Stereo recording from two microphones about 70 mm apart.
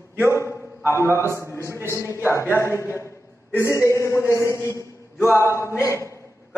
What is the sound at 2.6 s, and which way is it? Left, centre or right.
A man's voice, left.